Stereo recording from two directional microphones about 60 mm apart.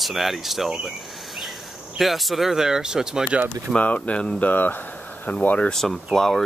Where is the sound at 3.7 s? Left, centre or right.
Left.